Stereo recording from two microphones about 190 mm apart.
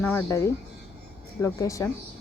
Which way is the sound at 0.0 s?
10° left (ahead or behind).